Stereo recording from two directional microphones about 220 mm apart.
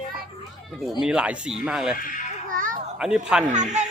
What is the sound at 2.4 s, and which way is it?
Babbling, 40° right (ahead or behind).